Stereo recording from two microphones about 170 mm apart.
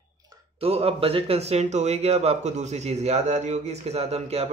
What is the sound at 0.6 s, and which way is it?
Speech, 35° right (ahead or behind).